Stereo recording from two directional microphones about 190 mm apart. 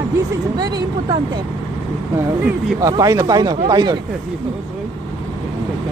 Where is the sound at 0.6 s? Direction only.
20° right (ahead or behind).